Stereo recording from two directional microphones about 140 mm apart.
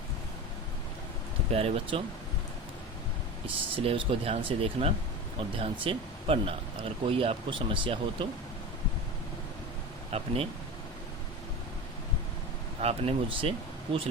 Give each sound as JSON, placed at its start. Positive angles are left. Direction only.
{"t": 1.5, "sound": "speech", "side_deg": -45}
{"t": 3.4, "sound": "speech", "side_deg": -40}
{"t": 10.1, "sound": "speech", "side_deg": -45}
{"t": 12.8, "sound": "speech", "side_deg": -45}